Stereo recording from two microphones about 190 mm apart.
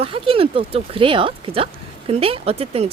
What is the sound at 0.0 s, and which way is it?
Speech, 30° right (ahead or behind).